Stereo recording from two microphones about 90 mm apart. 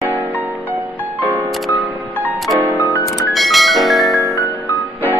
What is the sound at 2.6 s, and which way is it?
Music, 20° right (ahead or behind).